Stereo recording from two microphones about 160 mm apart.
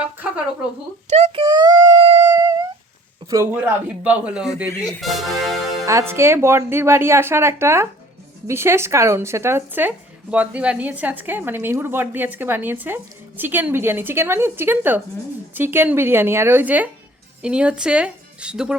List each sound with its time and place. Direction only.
1.0 s a child's voice: 45° right (ahead or behind)
1.4 s a sound: 25° right (ahead or behind)
2.1 s music: 20° right (ahead or behind)
3.2 s speech: 15° right (ahead or behind); by 5.5 s centre (ahead or behind)
5.8 s speech: 20° right (ahead or behind)